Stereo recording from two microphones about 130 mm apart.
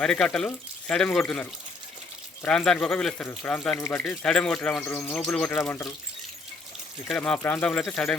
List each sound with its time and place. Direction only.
0.0 s speech: 5° left (ahead or behind)
2.4 s speech: 5° left (ahead or behind)
4.8 s speech: 15° left (ahead or behind)
5.5 s speech: 20° left (ahead or behind)
7.1 s speech: 10° left (ahead or behind)